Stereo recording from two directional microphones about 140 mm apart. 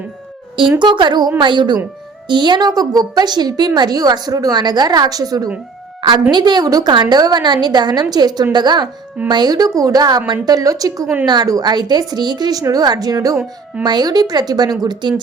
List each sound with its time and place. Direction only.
0.8 s a woman's voice: 35° right (ahead or behind)
13.3 s speech: 5° right (ahead or behind)
13.8 s a woman's voice: 30° right (ahead or behind)